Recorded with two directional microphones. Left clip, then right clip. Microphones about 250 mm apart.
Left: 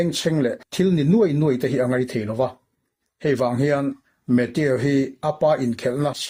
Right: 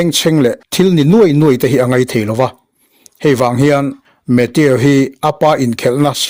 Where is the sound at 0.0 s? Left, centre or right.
Right.